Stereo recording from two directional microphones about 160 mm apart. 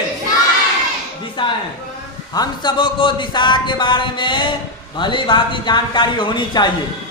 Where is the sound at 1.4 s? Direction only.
30° left (ahead or behind).